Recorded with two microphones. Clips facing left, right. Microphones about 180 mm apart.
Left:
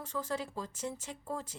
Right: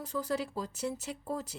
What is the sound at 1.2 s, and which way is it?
Speech, 40° right (ahead or behind).